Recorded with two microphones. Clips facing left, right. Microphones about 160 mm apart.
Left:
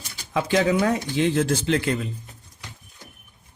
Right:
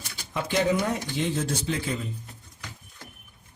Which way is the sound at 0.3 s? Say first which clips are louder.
Left 4 dB; 90° left.